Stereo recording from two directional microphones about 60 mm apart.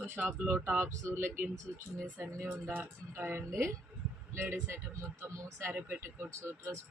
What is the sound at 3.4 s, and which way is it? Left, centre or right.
Speech, right.